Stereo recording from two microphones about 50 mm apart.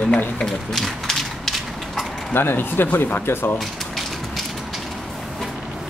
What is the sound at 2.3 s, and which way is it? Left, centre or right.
Speech, left.